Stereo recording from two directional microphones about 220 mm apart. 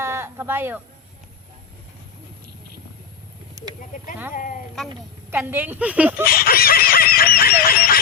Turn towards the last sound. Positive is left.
turn(degrees=40)  # may be behind; listen again after turning